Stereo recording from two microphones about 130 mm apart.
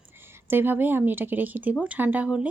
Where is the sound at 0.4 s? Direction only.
15° right (ahead or behind).